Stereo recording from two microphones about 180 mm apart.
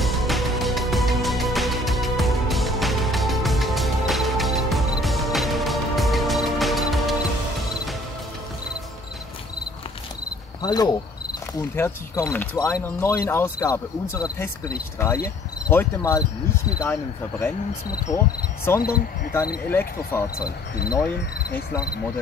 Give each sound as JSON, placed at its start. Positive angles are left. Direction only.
{"t": 0.0, "sound": "music", "side_deg": 0}
{"t": 10.6, "sound": "cricket", "side_deg": 20}
{"t": 11.5, "sound": "speech", "side_deg": 15}
{"t": 18.8, "sound": "cricket", "side_deg": 55}
{"t": 19.7, "sound": "speech", "side_deg": 15}
{"t": 20.3, "sound": "cricket", "side_deg": 55}